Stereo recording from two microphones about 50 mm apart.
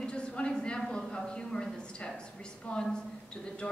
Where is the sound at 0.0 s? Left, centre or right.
Centre.